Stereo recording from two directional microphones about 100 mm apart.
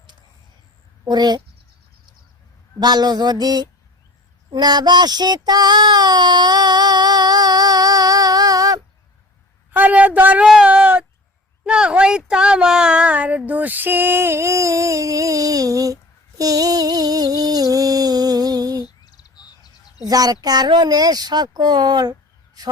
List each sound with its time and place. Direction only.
1.0 s speech: 45° right (ahead or behind)
2.8 s speech: 45° right (ahead or behind)
4.5 s child singing: 45° right (ahead or behind)
9.7 s a man's voice: 15° right (ahead or behind); by 16.0 s 35° right (ahead or behind)
16.4 s music: 35° right (ahead or behind)
19.0 s a sound: 40° left (ahead or behind)
20.1 s speech: 40° right (ahead or behind)